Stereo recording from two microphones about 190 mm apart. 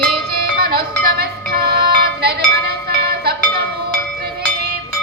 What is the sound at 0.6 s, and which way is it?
Music, 50° right (ahead or behind).